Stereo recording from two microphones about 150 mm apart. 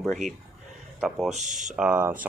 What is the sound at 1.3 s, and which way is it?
Speech, 55° right (ahead or behind).